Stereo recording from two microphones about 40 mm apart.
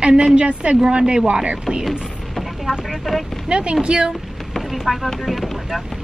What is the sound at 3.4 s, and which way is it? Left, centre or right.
Speech, right.